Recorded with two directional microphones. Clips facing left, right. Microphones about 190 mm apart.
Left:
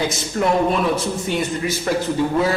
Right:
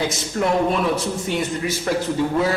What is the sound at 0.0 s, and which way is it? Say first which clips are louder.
Speech: left 1 dB; 15° left (ahead or behind).